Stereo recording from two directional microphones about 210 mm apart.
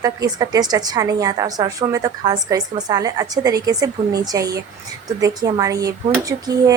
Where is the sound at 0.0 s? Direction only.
15° right (ahead or behind).